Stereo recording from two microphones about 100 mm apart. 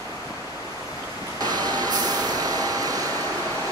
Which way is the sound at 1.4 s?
40° right (ahead or behind).